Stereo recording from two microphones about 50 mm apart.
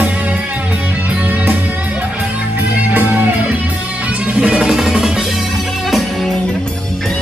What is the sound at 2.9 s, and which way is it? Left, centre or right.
Music, right.